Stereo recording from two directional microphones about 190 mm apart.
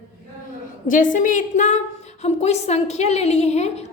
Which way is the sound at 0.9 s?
45° left (ahead or behind).